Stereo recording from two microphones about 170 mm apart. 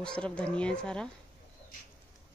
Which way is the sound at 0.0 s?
5° left (ahead or behind).